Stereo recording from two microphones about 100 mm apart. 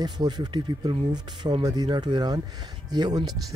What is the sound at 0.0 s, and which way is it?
Speech, 45° right (ahead or behind).